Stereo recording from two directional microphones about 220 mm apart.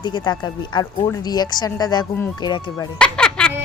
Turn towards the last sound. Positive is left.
turn(degrees=5)  # may be behind; listen again after turning